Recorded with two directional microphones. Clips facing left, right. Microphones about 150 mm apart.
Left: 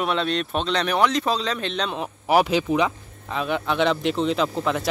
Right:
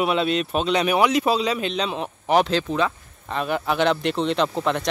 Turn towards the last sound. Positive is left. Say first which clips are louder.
# right 1 dB
turn(degrees=5)  # may be behind; listen again after turning